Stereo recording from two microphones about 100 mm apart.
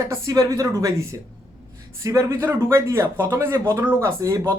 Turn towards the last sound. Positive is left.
turn(degrees=-35)  # may be behind; listen again after turning